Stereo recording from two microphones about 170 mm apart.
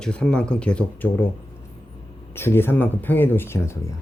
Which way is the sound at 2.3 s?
15° left (ahead or behind).